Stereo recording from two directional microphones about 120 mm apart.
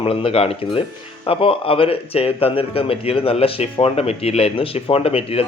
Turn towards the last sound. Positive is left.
turn(degrees=55)  # may be behind; listen again after turning